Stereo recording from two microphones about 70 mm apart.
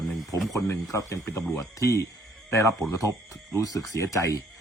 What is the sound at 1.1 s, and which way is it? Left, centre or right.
Speech, left.